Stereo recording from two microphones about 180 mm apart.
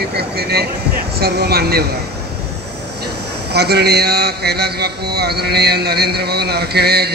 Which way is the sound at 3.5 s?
65° right (ahead or behind).